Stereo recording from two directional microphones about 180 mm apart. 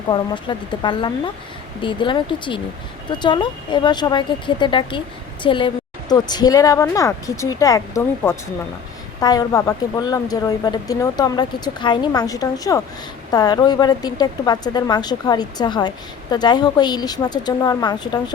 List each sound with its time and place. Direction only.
0.1 s speech: 25° left (ahead or behind)